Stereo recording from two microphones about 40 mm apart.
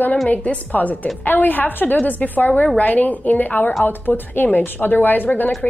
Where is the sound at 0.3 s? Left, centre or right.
Left.